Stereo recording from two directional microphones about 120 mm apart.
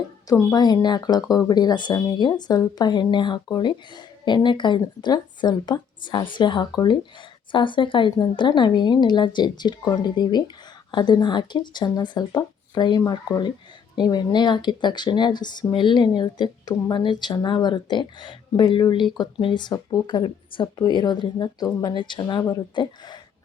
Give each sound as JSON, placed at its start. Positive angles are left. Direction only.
{"t": 0.3, "sound": "speech", "side_deg": 30}